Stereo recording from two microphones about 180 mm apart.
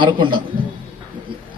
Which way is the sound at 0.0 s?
25° right (ahead or behind).